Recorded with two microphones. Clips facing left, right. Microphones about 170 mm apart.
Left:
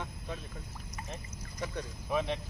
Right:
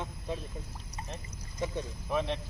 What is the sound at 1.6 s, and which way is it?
Speech, 25° right (ahead or behind).